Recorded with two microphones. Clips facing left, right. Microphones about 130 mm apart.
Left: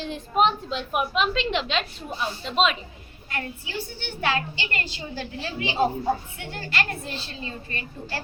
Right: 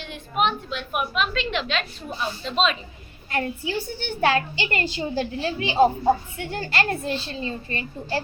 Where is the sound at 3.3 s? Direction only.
35° right (ahead or behind).